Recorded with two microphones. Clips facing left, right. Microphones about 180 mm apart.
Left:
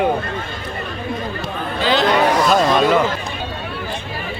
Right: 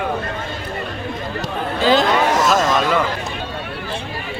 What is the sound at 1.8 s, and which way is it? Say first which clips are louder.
Speech: even; 45° right (ahead or behind).